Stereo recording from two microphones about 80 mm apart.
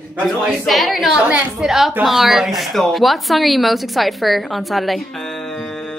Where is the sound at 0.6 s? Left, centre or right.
Centre.